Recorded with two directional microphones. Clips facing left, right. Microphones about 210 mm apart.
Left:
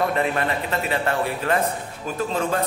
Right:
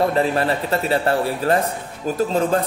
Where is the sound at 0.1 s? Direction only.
35° right (ahead or behind).